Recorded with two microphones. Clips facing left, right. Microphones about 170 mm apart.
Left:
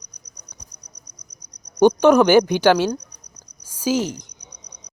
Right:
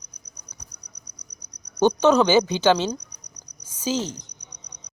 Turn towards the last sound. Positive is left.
turn(degrees=10)  # may be behind; listen again after turning